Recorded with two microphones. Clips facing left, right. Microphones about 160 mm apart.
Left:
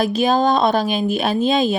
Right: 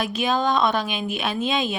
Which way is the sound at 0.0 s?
35° left (ahead or behind).